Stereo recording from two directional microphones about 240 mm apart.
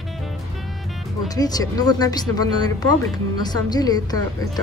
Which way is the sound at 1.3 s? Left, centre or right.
Centre.